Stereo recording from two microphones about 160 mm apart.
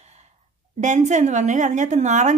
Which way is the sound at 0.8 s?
50° right (ahead or behind).